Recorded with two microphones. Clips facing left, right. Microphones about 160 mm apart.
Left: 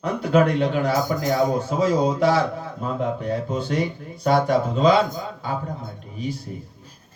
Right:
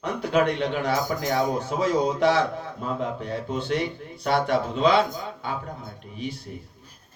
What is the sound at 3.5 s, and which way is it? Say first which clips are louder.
Speech: left 2 dB; 40° left (ahead or behind).